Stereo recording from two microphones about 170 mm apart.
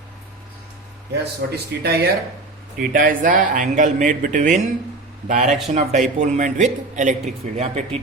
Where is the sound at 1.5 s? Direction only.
70° right (ahead or behind).